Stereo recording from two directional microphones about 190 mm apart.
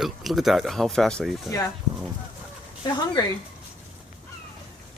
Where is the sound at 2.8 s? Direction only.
20° left (ahead or behind).